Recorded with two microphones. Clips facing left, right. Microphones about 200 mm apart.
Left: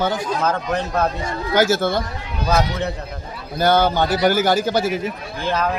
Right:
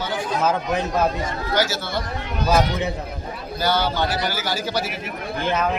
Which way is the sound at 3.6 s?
50° left (ahead or behind).